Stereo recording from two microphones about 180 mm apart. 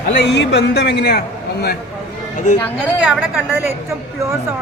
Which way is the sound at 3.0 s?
5° right (ahead or behind).